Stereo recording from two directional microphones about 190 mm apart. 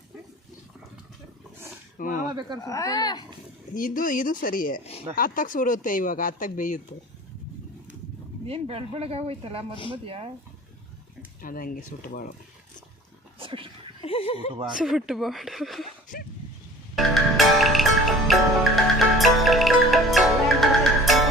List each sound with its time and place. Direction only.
2.0 s speech: 45° left (ahead or behind)
2.3 s speech: 20° right (ahead or behind)
2.6 s speech: 15° left (ahead or behind)
3.8 s speech: 45° left (ahead or behind)
8.4 s speech: 30° right (ahead or behind)
11.4 s speech: 50° left (ahead or behind)
13.4 s a sound: 25° right (ahead or behind)
14.0 s speech: 30° left (ahead or behind)
14.8 s speech: 5° right (ahead or behind)
16.9 s music: centre (ahead or behind)